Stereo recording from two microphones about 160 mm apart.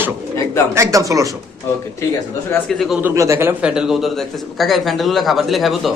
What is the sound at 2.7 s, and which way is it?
Speech, centre (ahead or behind).